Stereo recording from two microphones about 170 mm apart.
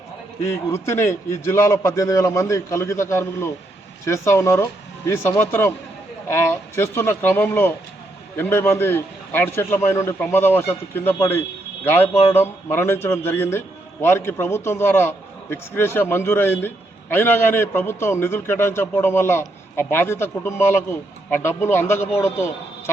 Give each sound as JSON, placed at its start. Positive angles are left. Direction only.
{"t": 0.7, "sound": "a man's voice", "side_deg": 15}